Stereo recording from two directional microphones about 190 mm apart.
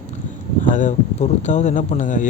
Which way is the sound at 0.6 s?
40° left (ahead or behind).